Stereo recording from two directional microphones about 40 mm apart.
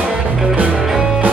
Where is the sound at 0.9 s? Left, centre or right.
Centre.